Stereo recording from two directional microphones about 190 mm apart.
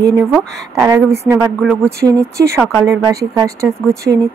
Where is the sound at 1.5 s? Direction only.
5° left (ahead or behind).